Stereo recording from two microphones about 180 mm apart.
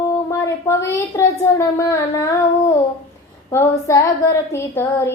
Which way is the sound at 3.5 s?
15° left (ahead or behind).